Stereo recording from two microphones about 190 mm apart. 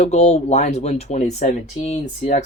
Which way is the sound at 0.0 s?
35° left (ahead or behind).